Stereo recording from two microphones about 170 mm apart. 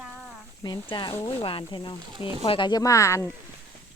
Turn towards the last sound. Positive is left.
turn(degrees=15)  # may be behind; listen again after turning